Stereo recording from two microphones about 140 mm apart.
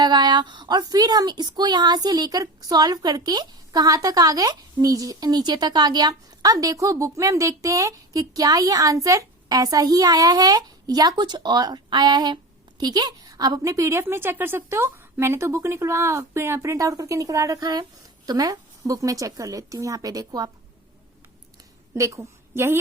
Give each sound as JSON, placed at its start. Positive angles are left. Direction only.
{"t": 0.0, "sound": "a woman's voice", "side_deg": -30}
{"t": 21.9, "sound": "a woman's voice", "side_deg": -20}